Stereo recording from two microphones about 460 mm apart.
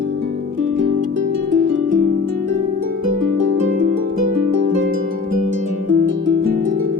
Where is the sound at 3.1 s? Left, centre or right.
Right.